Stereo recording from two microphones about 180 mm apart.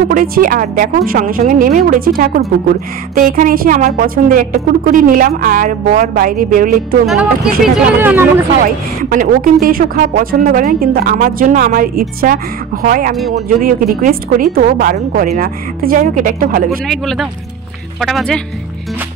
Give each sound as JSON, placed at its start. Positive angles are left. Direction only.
{"t": 0.1, "sound": "speech", "side_deg": -50}
{"t": 7.6, "sound": "speech", "side_deg": -5}
{"t": 9.1, "sound": "speech", "side_deg": -50}
{"t": 16.8, "sound": "speech", "side_deg": 0}